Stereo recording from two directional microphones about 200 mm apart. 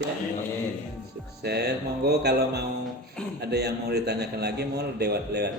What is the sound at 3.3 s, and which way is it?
A man's voice, 55° right (ahead or behind).